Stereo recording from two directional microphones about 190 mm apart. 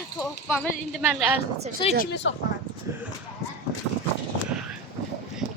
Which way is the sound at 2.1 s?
70° left (ahead or behind).